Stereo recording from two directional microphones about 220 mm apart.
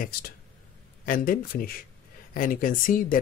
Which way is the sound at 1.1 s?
40° left (ahead or behind).